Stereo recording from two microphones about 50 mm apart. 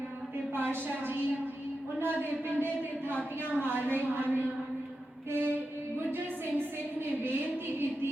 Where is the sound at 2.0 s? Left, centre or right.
Right.